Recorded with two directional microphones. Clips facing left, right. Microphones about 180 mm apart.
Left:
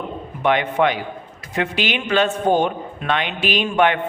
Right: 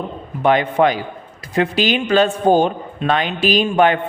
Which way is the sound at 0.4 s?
35° right (ahead or behind).